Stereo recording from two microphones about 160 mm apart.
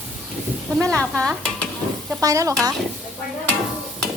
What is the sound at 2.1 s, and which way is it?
Speech, 20° right (ahead or behind).